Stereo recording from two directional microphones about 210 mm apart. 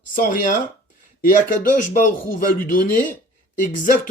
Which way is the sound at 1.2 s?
40° left (ahead or behind).